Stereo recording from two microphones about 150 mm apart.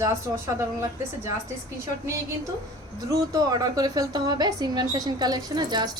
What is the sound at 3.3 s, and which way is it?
A woman's voice, 25° right (ahead or behind).